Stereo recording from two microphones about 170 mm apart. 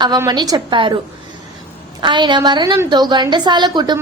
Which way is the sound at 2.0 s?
25° right (ahead or behind).